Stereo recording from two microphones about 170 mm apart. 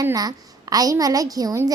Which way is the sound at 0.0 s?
20° right (ahead or behind).